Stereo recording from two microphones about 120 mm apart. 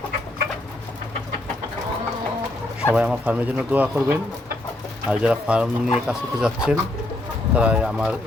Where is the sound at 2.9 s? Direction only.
15° right (ahead or behind).